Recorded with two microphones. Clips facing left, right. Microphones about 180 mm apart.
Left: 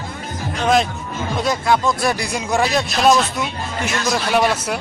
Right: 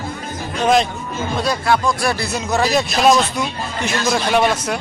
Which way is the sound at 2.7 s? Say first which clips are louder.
Right 2 dB; centre (ahead or behind).